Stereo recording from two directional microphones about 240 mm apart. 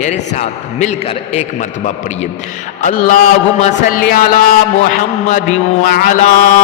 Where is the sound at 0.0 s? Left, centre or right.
Left.